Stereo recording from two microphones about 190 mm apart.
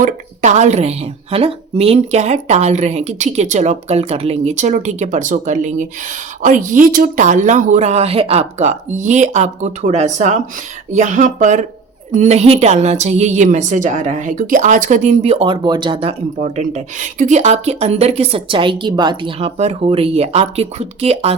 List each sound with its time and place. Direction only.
0.0 s a woman's voice: 40° right (ahead or behind)